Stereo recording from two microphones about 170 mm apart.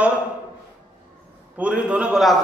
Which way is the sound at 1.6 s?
5° right (ahead or behind).